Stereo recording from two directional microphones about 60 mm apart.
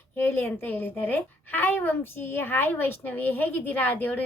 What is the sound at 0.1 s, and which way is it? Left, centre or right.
A woman's voice, left.